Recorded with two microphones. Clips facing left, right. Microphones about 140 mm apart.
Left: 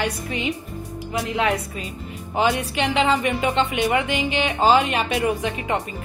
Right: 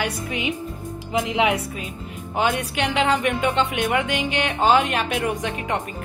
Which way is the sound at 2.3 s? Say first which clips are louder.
Left 1 dB; 5° left (ahead or behind).